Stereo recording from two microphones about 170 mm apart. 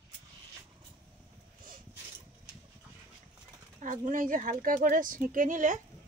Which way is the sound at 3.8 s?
50° right (ahead or behind).